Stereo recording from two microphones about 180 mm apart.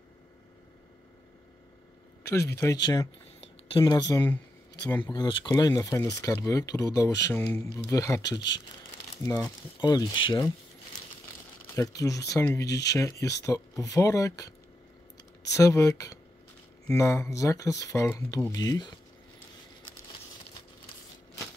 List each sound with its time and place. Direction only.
2.2 s speech: 15° left (ahead or behind)
11.7 s speech: 20° left (ahead or behind)
15.5 s speech: 15° left (ahead or behind)